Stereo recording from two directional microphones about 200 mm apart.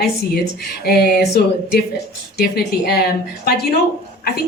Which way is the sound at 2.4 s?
50° left (ahead or behind).